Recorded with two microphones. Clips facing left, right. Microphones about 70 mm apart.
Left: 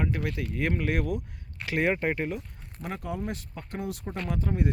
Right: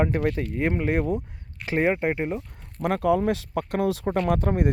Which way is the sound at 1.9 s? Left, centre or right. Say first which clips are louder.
Right 3 dB; centre.